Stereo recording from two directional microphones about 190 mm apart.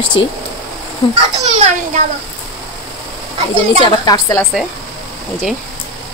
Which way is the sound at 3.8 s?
20° left (ahead or behind).